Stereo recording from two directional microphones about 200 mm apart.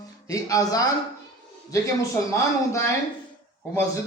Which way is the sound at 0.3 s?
15° left (ahead or behind).